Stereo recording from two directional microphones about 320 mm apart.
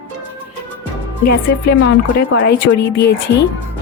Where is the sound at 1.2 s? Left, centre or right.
Left.